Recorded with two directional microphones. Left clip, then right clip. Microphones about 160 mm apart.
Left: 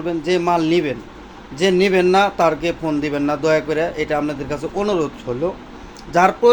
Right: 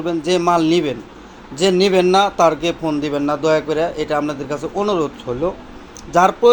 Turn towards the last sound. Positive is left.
turn(degrees=-10)  # may be behind; listen again after turning